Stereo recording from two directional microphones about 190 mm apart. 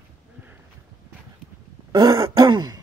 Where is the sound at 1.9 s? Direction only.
20° right (ahead or behind).